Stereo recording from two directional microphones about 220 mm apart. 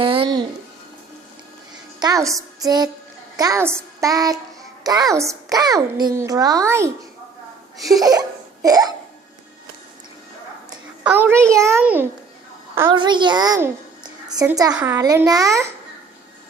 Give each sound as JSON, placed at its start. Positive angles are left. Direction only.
{"t": 0.0, "sound": "music", "side_deg": -25}
{"t": 2.0, "sound": "a woman's voice", "side_deg": -15}
{"t": 7.9, "sound": "a child's voice", "side_deg": -15}
{"t": 11.0, "sound": "a child's voice", "side_deg": -10}